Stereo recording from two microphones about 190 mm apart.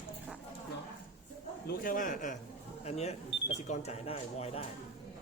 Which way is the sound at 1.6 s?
45° left (ahead or behind).